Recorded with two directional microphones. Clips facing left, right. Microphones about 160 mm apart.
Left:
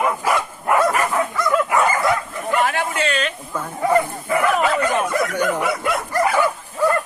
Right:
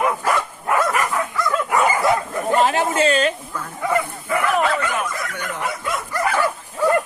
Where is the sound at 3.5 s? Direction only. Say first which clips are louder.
Left 4 dB; 30° left (ahead or behind).